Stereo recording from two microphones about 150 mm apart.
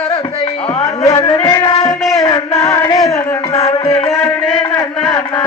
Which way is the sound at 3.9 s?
40° left (ahead or behind).